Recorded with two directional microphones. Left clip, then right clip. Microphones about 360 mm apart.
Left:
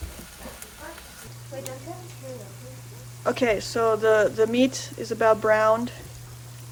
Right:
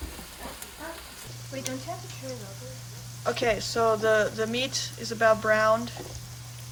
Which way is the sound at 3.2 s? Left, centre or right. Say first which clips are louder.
Left 3 dB; centre.